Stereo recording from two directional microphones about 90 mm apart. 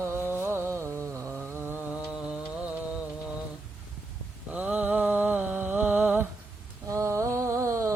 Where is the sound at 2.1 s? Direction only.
10° right (ahead or behind).